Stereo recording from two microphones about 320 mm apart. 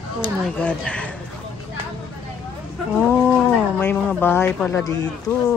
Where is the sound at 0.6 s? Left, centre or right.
Centre.